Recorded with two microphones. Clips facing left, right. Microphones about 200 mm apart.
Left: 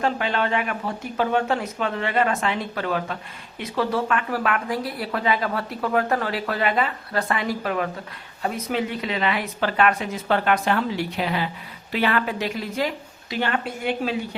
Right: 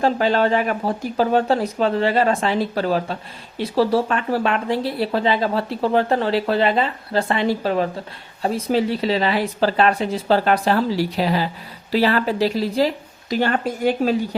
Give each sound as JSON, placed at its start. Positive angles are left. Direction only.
{"t": 0.0, "sound": "speech", "side_deg": -35}